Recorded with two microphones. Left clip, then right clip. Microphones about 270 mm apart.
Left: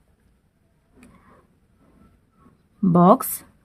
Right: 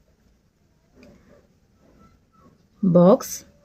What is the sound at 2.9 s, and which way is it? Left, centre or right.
Speech, centre.